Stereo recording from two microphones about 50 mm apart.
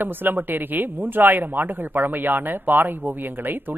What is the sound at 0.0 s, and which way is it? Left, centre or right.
A woman's voice, right.